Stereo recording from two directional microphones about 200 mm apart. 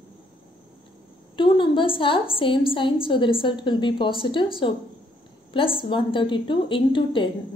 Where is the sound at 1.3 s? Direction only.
25° left (ahead or behind).